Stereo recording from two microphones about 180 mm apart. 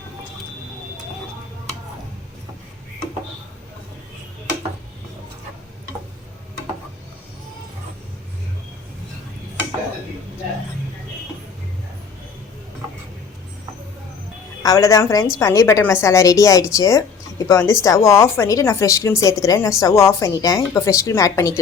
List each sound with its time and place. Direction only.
14.6 s a woman's voice: 20° left (ahead or behind)